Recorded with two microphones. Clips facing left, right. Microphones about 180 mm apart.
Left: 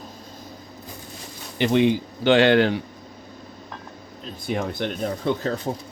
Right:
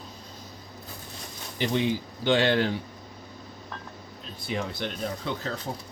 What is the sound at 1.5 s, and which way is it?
Speech, 70° left (ahead or behind).